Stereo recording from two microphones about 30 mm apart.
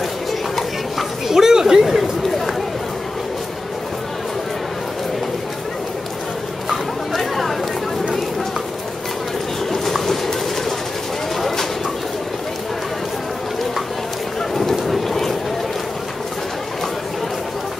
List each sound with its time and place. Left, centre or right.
1.3 s chatter: centre
1.8 s chatter: centre
2.2 s chatter: centre
6.7 s chatter: centre
9.9 s a sound: centre
14.5 s honk: centre